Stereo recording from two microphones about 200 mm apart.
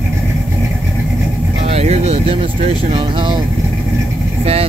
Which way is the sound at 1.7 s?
30° right (ahead or behind).